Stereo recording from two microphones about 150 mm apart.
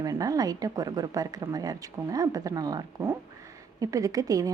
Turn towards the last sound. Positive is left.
turn(degrees=-25)  # may be behind; listen again after turning